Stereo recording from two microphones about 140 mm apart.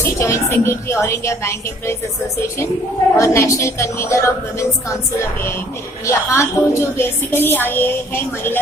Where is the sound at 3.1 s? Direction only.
20° left (ahead or behind).